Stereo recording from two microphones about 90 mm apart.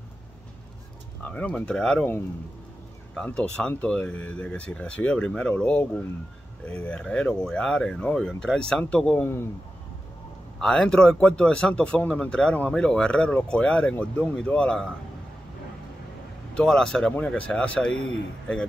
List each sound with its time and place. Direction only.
1.2 s speech: 15° left (ahead or behind)
3.3 s speech: 10° left (ahead or behind)
10.6 s speech: 10° left (ahead or behind)
16.5 s speech: 5° left (ahead or behind)